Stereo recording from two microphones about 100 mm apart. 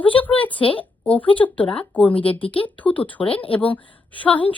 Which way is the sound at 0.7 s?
15° left (ahead or behind).